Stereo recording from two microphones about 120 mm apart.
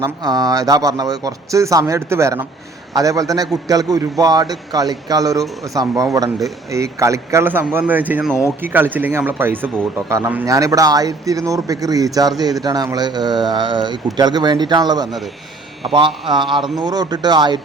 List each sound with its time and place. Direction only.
0.0 s a man's voice: 35° right (ahead or behind)
15.8 s speech: 45° right (ahead or behind)